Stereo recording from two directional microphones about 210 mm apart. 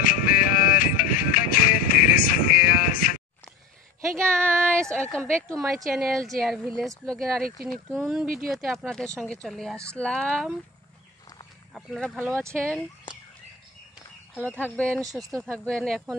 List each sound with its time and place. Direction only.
0.0 s music: 40° left (ahead or behind)
4.2 s a sound: 5° left (ahead or behind)
4.9 s a woman's voice: 5° left (ahead or behind)
5.5 s a woman's voice: 15° right (ahead or behind)
5.9 s a woman's voice: centre (ahead or behind)
11.7 s a woman's voice: centre (ahead or behind)
12.3 s a woman's voice: 15° right (ahead or behind)
14.4 s a woman's voice: 5° left (ahead or behind)